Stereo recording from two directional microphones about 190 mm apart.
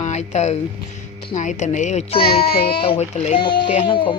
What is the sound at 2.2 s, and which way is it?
Speech, 55° left (ahead or behind).